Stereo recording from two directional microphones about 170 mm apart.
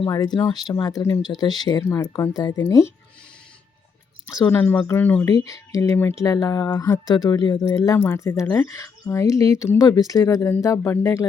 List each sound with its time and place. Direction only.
0.0 s speech: 20° left (ahead or behind)
4.4 s speech: 10° left (ahead or behind)
5.2 s speech: 20° left (ahead or behind)